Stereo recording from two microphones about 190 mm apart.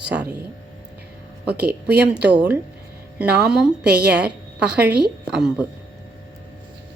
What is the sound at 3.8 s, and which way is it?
Speech, 55° right (ahead or behind).